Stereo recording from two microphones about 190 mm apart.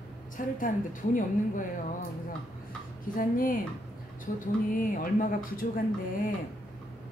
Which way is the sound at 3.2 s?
45° left (ahead or behind).